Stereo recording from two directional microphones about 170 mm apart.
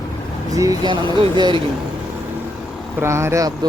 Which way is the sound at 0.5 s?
20° right (ahead or behind).